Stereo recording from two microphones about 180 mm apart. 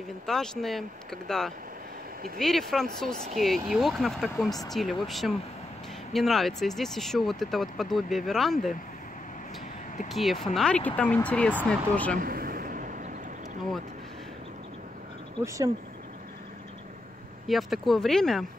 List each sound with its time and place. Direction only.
0.3 s speech: centre (ahead or behind)
10.0 s speech: centre (ahead or behind)
12.2 s a sound: 55° right (ahead or behind)
15.4 s speech: 15° right (ahead or behind)
17.5 s speech: centre (ahead or behind)